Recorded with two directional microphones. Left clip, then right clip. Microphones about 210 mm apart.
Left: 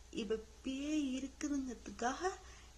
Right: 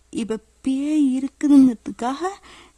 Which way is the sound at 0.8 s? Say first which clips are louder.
Right 18 dB; 45° right (ahead or behind).